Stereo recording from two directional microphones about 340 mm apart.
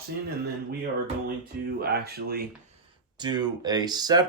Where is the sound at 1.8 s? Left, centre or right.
Right.